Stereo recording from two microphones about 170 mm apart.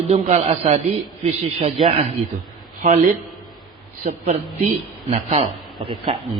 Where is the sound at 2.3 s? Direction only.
45° right (ahead or behind).